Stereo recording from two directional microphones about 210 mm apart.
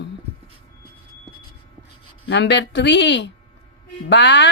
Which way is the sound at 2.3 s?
55° left (ahead or behind).